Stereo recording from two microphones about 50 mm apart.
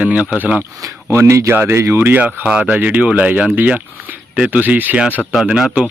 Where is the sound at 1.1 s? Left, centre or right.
Right.